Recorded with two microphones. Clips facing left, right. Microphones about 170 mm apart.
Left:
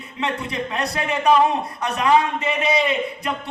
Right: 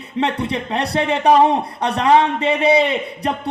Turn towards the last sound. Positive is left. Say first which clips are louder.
# right 3 dB
turn(degrees=-30)  # may be behind; listen again after turning